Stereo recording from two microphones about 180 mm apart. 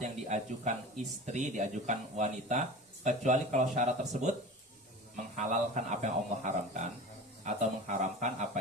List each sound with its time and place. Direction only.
0.0 s a sound: 40° right (ahead or behind)
1.3 s speech: 40° right (ahead or behind)
5.4 s speech: 40° right (ahead or behind)